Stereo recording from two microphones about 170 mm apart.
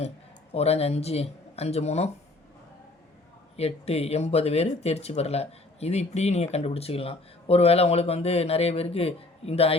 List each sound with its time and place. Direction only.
0.5 s speech: 35° left (ahead or behind)
3.6 s speech: 35° left (ahead or behind)